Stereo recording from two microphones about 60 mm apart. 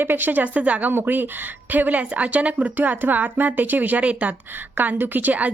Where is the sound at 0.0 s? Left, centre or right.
Right.